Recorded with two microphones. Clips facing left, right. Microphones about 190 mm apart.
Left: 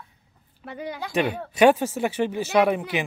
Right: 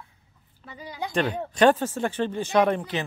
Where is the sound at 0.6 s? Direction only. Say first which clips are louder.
Left 8 dB; 60° left (ahead or behind).